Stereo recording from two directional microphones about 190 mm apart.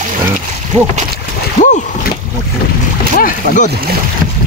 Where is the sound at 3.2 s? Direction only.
45° left (ahead or behind).